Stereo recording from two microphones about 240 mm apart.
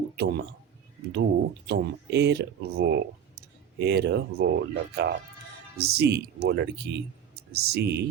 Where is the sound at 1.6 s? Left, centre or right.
Right.